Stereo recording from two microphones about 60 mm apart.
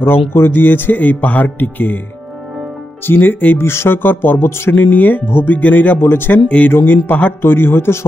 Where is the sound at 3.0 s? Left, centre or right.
Left.